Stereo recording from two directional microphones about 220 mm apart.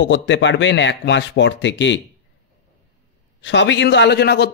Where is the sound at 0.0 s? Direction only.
55° left (ahead or behind).